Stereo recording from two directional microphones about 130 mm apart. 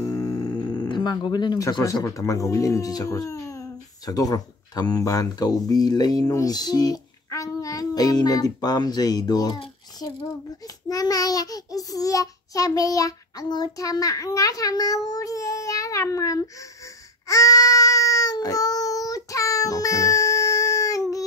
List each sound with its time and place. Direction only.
0.0 s speech: 25° left (ahead or behind)
10.9 s child singing: 30° left (ahead or behind)
17.3 s baby cry: 25° left (ahead or behind)